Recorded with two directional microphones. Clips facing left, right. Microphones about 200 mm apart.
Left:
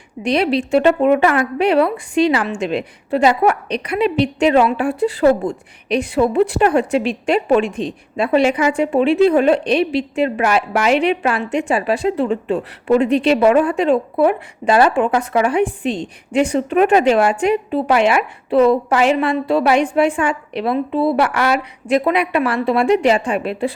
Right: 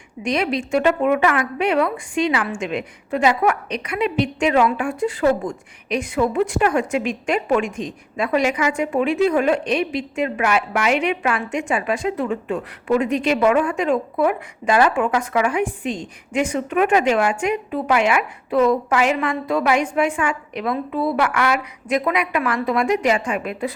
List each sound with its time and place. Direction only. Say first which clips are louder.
0.2 s a woman's voice: left 5 dB; 35° left (ahead or behind)